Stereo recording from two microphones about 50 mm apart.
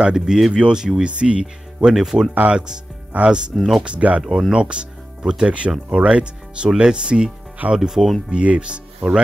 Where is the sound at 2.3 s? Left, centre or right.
Right.